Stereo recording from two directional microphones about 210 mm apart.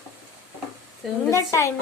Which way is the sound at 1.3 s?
15° left (ahead or behind).